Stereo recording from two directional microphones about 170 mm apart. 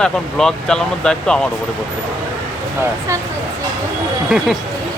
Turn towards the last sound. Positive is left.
turn(degrees=0)  # may be behind; listen again after turning